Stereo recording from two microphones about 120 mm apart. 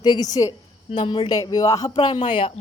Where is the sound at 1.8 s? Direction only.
45° left (ahead or behind).